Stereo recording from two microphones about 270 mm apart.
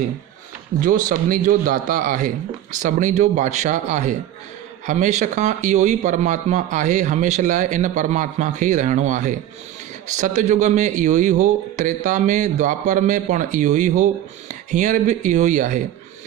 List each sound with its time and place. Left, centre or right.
0.8 s a man's voice: right